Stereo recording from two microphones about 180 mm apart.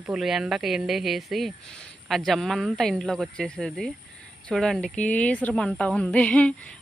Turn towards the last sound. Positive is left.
turn(degrees=5)  # may be behind; listen again after turning